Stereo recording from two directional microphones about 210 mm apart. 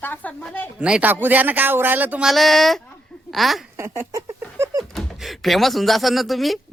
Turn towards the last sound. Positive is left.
turn(degrees=0)  # may be behind; listen again after turning